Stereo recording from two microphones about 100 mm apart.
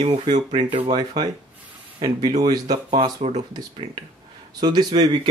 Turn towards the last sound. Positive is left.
turn(degrees=-45)  # may be behind; listen again after turning